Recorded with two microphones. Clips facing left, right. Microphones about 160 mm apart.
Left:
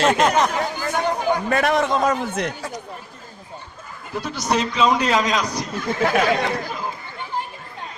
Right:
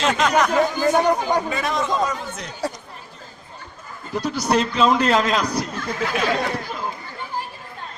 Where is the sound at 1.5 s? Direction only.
65° left (ahead or behind).